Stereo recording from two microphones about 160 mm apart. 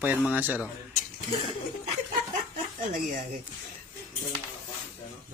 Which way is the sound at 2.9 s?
55° right (ahead or behind).